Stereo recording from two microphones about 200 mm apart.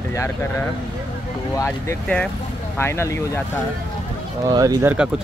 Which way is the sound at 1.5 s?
15° left (ahead or behind).